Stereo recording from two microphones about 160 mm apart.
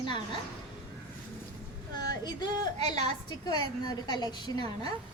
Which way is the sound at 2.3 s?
25° left (ahead or behind).